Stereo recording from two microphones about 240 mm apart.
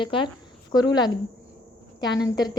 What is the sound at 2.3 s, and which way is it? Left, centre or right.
Speech, centre.